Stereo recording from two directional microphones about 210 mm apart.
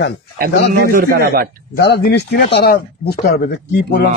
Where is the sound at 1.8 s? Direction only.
50° left (ahead or behind).